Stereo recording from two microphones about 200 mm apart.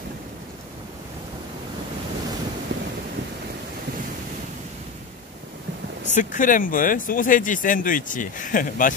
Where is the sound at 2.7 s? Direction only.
60° right (ahead or behind).